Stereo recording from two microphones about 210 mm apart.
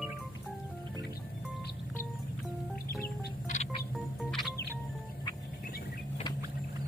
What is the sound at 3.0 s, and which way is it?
Music, 35° left (ahead or behind).